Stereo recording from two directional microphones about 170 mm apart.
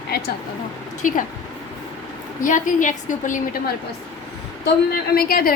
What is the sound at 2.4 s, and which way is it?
Speech, 50° left (ahead or behind).